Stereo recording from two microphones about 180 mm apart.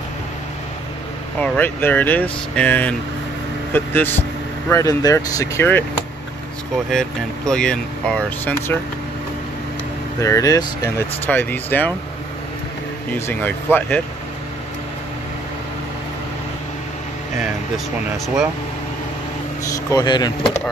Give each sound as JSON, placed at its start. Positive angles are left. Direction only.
{"t": 1.4, "sound": "speech", "side_deg": 10}
{"t": 6.9, "sound": "speech", "side_deg": 5}
{"t": 10.2, "sound": "speech", "side_deg": 20}
{"t": 13.1, "sound": "speech", "side_deg": 10}
{"t": 18.1, "sound": "speech", "side_deg": 0}
{"t": 19.9, "sound": "speech", "side_deg": 25}